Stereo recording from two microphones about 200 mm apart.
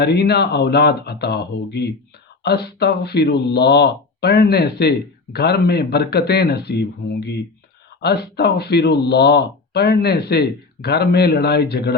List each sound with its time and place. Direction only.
0.0 s speech: 55° left (ahead or behind)
8.0 s speech: 55° left (ahead or behind)